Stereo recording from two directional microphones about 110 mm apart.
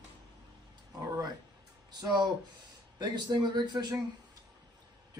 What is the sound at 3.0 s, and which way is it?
Speech, 40° right (ahead or behind).